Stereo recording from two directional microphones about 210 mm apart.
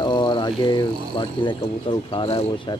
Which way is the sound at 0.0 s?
20° left (ahead or behind).